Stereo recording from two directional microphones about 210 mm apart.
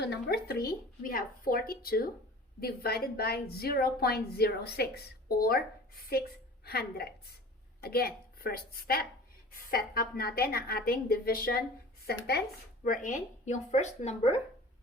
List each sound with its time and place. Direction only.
0.0 s a woman's voice: 50° left (ahead or behind); by 14.3 s 30° left (ahead or behind)